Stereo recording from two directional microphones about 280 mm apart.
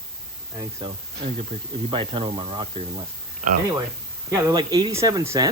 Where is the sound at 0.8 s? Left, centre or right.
Centre.